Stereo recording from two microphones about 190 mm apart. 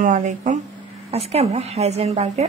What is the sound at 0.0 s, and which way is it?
A woman's voice, 45° right (ahead or behind).